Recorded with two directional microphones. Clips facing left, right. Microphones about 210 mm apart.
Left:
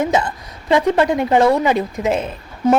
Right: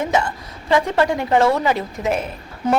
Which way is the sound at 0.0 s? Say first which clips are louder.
Left 2 dB; 20° left (ahead or behind).